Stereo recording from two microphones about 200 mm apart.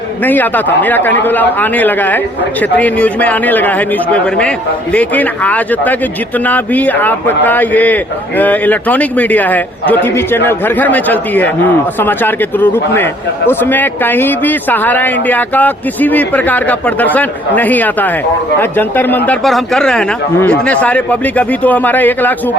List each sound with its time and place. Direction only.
0.3 s a man's voice: 10° left (ahead or behind)